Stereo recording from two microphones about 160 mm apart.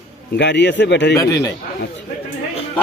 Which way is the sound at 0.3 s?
90° left.